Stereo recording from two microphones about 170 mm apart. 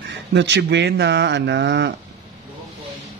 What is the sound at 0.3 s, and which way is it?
A man's voice, 90° right.